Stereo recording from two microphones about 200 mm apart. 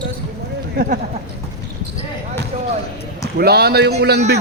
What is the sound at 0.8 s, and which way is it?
Speech, 50° right (ahead or behind).